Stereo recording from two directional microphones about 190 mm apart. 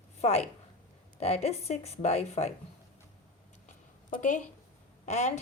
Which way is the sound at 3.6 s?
40° left (ahead or behind).